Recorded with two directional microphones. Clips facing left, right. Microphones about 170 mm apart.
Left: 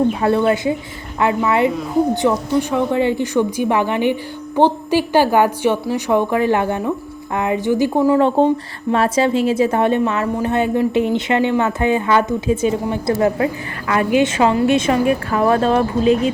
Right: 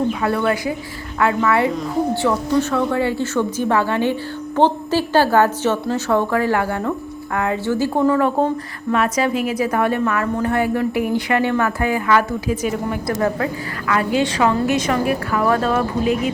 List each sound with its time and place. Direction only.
0.1 s a woman's voice: 25° left (ahead or behind)
8.9 s a woman's voice: 30° left (ahead or behind)